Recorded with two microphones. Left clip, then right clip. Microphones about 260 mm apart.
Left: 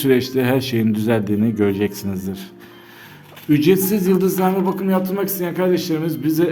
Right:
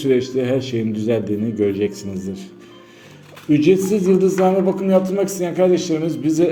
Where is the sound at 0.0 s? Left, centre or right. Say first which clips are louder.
Left 1 dB; left.